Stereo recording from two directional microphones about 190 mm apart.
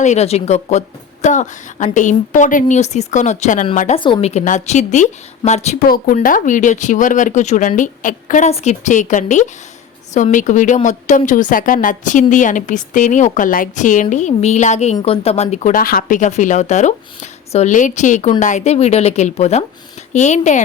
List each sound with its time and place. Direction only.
0.0 s speech: 35° left (ahead or behind)
4.0 s speech: 30° left (ahead or behind)
5.8 s speech: 50° left (ahead or behind)